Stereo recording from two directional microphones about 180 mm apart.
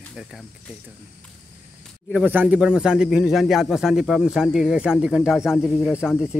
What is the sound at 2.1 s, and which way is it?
A man's voice, 5° right (ahead or behind).